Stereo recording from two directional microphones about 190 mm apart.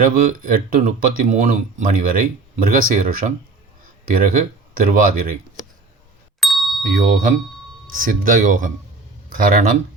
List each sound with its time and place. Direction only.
0.0 s speech: 45° right (ahead or behind)
6.4 s ding: centre (ahead or behind)
6.9 s speech: 45° right (ahead or behind)